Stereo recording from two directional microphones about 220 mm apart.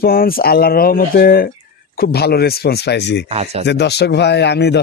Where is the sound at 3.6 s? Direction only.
50° left (ahead or behind).